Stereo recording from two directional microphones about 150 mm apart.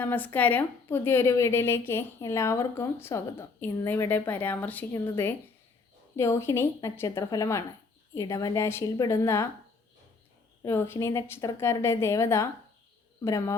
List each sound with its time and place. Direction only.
0.0 s a woman's voice: 15° left (ahead or behind)
10.6 s a woman's voice: 15° left (ahead or behind)